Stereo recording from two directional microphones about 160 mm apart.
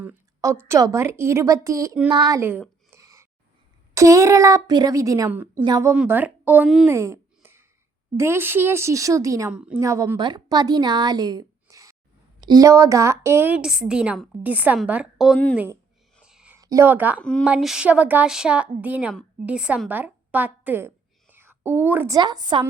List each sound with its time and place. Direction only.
0.0 s a sound: 10° right (ahead or behind)
0.7 s a woman's voice: 20° right (ahead or behind)
2.4 s a sound: 10° right (ahead or behind)
3.9 s a woman's voice: 20° right (ahead or behind)
6.0 s a woman's voice: 10° right (ahead or behind)
6.8 s a sound: 15° right (ahead or behind)
8.1 s a woman's voice: 15° right (ahead or behind)
9.5 s a woman's voice: 5° right (ahead or behind)
9.8 s a woman's voice: 20° right (ahead or behind)
16.2 s a sound: 5° right (ahead or behind)
16.6 s a woman's voice: 20° right (ahead or behind)
17.2 s a woman's voice: 5° left (ahead or behind); by 22.6 s 25° right (ahead or behind)